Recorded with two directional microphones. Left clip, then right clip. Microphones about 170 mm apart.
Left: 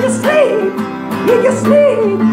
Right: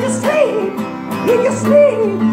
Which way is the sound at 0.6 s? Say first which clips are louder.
Left 3 dB; 15° right (ahead or behind).